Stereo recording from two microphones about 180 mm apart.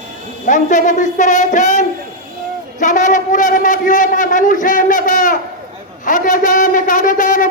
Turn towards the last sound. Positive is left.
turn(degrees=45)  # may be behind; listen again after turning